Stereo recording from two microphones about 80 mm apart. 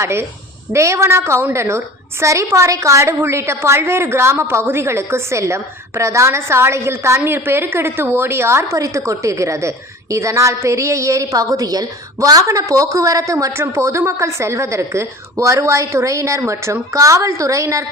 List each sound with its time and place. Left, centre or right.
0.0 s a woman's voice: right